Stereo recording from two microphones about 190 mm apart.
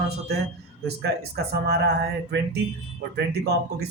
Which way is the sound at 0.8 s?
55° right (ahead or behind).